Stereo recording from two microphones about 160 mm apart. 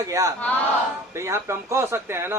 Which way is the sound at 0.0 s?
20° right (ahead or behind).